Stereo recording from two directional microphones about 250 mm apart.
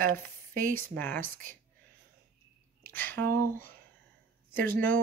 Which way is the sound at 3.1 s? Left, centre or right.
Right.